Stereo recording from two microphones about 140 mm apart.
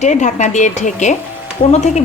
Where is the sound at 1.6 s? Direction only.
35° left (ahead or behind).